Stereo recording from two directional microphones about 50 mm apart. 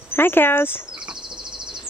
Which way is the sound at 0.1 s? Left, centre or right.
Left.